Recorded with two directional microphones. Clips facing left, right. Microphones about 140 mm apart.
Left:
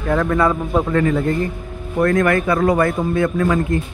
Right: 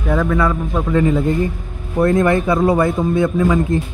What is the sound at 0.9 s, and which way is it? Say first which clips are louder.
Speech: right 5 dB; 15° right (ahead or behind).